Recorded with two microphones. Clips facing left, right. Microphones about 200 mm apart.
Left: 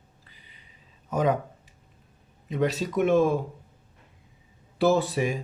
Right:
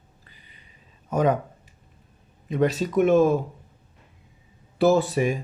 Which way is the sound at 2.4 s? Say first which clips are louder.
Right 3 dB; 50° right (ahead or behind).